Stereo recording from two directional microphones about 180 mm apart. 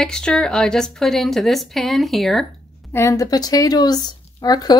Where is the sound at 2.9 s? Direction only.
15° left (ahead or behind).